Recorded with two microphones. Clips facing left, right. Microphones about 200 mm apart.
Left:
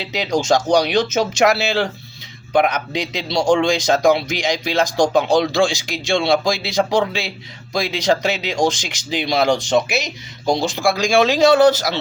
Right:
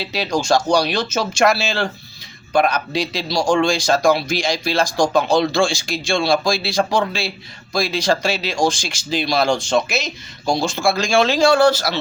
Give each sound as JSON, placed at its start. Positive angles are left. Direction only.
{"t": 0.0, "sound": "a man's voice", "side_deg": 20}